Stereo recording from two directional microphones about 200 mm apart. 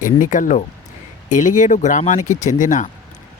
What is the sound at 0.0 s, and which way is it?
Speech, 40° left (ahead or behind).